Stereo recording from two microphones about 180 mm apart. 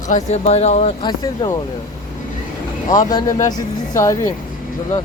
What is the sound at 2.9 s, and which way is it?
Speech, 20° left (ahead or behind).